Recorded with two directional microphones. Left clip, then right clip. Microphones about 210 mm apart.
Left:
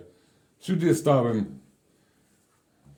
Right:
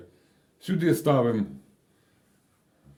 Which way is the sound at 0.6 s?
5° right (ahead or behind).